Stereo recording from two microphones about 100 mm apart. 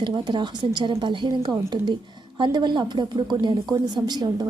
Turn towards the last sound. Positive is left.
turn(degrees=-45)  # may be behind; listen again after turning